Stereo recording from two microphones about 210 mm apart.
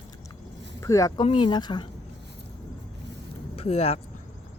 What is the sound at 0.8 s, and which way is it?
Speech, 15° left (ahead or behind).